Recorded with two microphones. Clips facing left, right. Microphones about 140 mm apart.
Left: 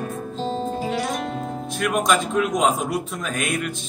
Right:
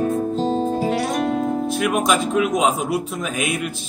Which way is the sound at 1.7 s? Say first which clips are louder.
Left 1 dB; 5° right (ahead or behind).